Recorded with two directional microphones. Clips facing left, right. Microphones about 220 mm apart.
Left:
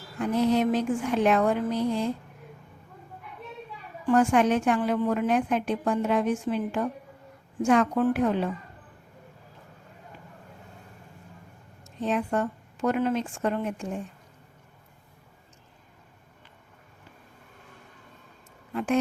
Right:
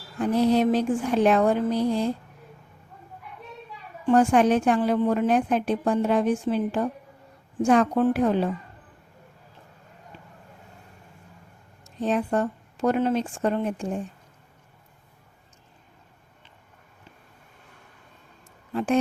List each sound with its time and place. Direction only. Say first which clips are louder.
0.2 s a woman's voice: right 3 dB; 35° right (ahead or behind)
4.0 s a woman's voice: right 3 dB; 35° right (ahead or behind)
11.9 s a woman's voice: right 3 dB; 35° right (ahead or behind)
18.7 s speech: right 2 dB; 30° right (ahead or behind)